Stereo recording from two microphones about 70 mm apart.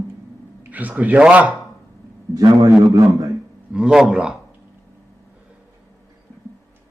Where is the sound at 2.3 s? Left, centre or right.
Right.